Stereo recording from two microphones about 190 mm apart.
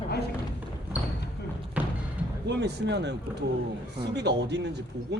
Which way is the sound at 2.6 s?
65° right (ahead or behind).